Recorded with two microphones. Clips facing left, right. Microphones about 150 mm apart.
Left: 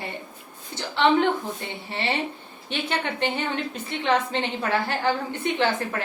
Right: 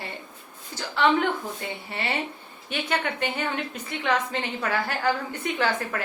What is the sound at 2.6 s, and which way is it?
A woman's voice, 25° left (ahead or behind).